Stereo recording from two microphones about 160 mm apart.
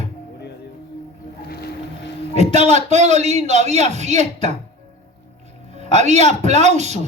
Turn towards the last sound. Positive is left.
turn(degrees=-45)  # may be behind; listen again after turning